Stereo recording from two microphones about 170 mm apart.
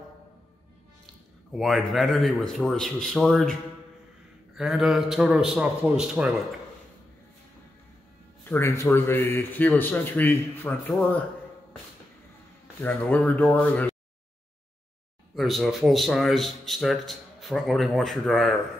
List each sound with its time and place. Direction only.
1.5 s speech: centre (ahead or behind)
4.6 s speech: centre (ahead or behind)
8.5 s a man's voice: 15° left (ahead or behind)
12.8 s a man's voice: 10° left (ahead or behind)
15.3 s speech: centre (ahead or behind)